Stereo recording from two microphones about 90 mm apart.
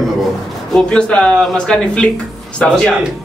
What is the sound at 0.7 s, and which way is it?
Speech, 10° left (ahead or behind).